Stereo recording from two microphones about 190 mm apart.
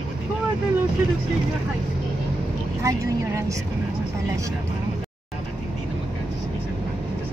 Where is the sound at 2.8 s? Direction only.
15° right (ahead or behind).